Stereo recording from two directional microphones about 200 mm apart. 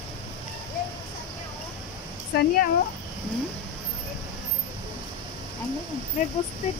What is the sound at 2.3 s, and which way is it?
Speech, 50° left (ahead or behind).